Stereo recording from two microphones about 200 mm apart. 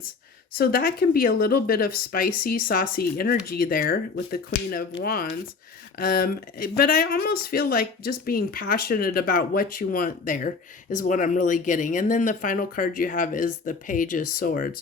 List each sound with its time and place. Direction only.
0.6 s speech: 45° left (ahead or behind)